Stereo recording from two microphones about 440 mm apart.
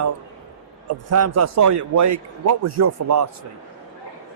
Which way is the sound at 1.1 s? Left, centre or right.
Right.